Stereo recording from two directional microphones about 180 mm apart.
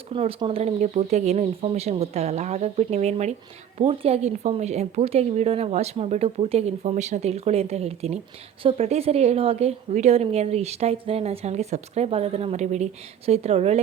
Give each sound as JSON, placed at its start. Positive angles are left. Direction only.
{"t": 0.1, "sound": "a woman's voice", "side_deg": -30}